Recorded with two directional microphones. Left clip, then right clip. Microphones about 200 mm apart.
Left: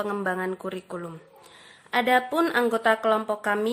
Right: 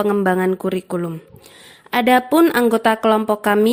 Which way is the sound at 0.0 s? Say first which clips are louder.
Right 10 dB; 35° right (ahead or behind).